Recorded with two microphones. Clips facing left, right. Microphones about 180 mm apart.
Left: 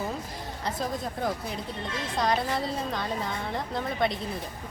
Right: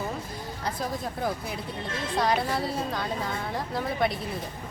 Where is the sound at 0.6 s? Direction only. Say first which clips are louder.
Even; centre (ahead or behind).